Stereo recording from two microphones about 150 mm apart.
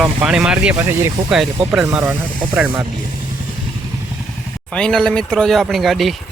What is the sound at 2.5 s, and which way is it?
Speech, 10° right (ahead or behind).